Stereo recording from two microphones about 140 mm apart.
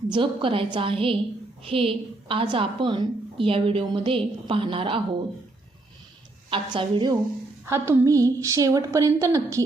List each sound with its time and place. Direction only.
0.1 s a woman's voice: 40° right (ahead or behind)
6.5 s a woman's voice: 40° right (ahead or behind)
7.6 s a woman's voice: 15° right (ahead or behind)